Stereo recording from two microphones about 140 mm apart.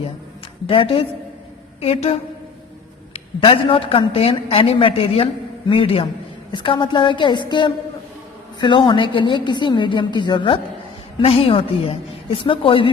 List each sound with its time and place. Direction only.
0.7 s a woman's voice: 40° left (ahead or behind)
3.4 s a woman's voice: 40° left (ahead or behind)